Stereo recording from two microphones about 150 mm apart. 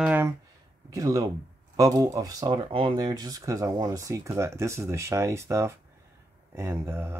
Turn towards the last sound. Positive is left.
turn(degrees=-15)  # may be behind; listen again after turning